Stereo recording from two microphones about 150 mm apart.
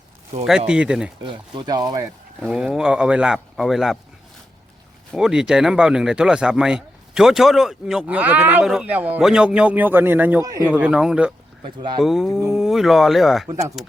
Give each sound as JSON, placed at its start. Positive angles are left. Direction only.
{"t": 0.7, "sound": "speech", "side_deg": -5}
{"t": 1.2, "sound": "speech", "side_deg": -30}
{"t": 2.4, "sound": "speech", "side_deg": -5}
{"t": 5.1, "sound": "speech", "side_deg": -5}
{"t": 10.4, "sound": "speech", "side_deg": -25}
{"t": 10.8, "sound": "speech", "side_deg": -5}
{"t": 11.6, "sound": "speech", "side_deg": -30}
{"t": 12.0, "sound": "speech", "side_deg": 0}